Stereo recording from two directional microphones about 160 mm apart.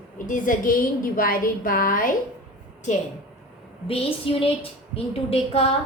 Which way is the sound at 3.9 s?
35° left (ahead or behind).